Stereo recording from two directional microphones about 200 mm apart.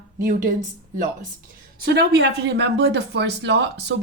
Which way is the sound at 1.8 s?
60° right (ahead or behind).